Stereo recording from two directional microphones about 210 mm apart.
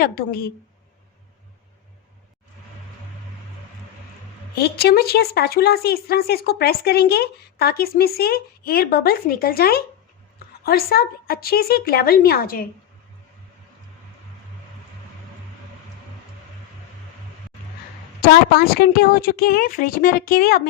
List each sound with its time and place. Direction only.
0.0 s speech: 45° left (ahead or behind)
4.5 s speech: 50° left (ahead or behind)
18.2 s speech: 45° left (ahead or behind)